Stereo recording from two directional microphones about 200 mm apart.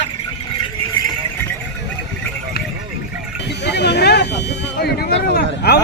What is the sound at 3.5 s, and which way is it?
Vehicle, 55° left (ahead or behind).